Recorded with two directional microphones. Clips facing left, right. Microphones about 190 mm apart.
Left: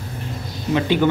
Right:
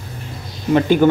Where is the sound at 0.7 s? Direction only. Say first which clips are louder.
Right 5 dB; 45° right (ahead or behind).